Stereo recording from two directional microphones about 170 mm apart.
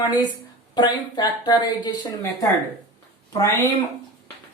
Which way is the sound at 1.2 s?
25° left (ahead or behind).